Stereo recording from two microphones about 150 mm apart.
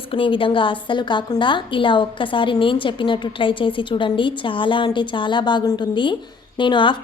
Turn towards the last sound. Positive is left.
turn(degrees=30)  # may be behind; listen again after turning